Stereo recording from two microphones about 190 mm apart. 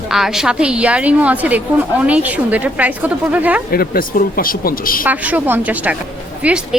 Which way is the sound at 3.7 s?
50° left (ahead or behind).